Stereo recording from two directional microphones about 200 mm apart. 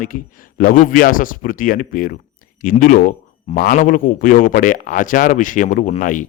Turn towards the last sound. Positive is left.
turn(degrees=40)  # may be behind; listen again after turning